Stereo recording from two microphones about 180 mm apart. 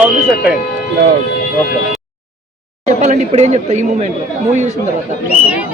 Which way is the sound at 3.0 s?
40° right (ahead or behind).